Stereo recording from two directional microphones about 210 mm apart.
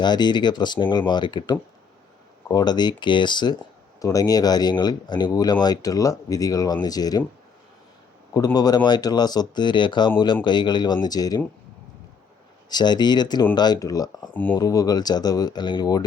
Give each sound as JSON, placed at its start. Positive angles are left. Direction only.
{"t": 0.0, "sound": "speech", "side_deg": 20}
{"t": 8.3, "sound": "speech", "side_deg": 20}
{"t": 12.7, "sound": "speech", "side_deg": 20}